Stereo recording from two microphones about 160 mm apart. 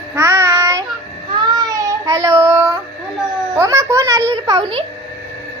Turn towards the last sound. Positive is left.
turn(degrees=-20)  # may be behind; listen again after turning